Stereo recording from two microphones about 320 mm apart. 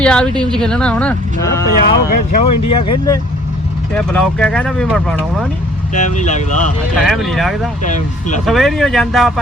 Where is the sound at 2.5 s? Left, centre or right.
Left.